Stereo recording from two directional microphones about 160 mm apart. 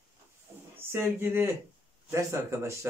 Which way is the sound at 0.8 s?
15° right (ahead or behind).